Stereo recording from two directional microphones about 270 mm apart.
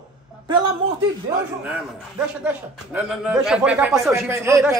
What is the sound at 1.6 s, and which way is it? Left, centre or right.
A man's voice, centre.